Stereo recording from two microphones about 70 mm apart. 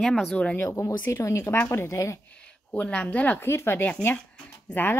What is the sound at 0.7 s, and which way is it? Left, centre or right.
Speech, left.